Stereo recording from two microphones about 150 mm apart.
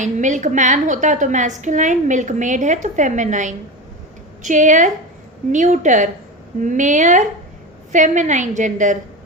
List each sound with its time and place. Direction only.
0.0 s a woman's voice: 55° right (ahead or behind)